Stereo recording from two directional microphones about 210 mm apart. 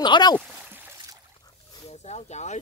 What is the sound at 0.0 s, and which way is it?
Speech, 20° left (ahead or behind).